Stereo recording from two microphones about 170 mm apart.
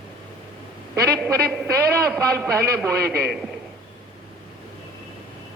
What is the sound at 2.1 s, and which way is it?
Speech, 15° right (ahead or behind).